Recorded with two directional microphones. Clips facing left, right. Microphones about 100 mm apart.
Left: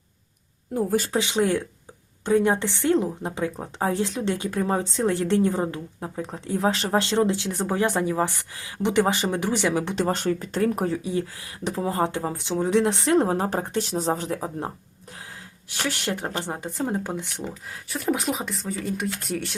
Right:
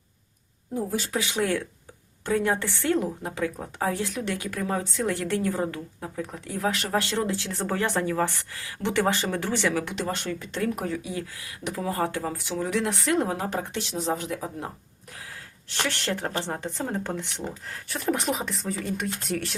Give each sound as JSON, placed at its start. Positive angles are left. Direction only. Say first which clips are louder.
{"t": 1.1, "sound": "speech", "louder": "left 4 dB", "side_deg": 25}
{"t": 9.9, "sound": "speech", "louder": "left 6 dB", "side_deg": 40}
{"t": 15.9, "sound": "speech", "louder": "left 2 dB", "side_deg": 15}
{"t": 17.8, "sound": "speech", "louder": "left 1 dB", "side_deg": 0}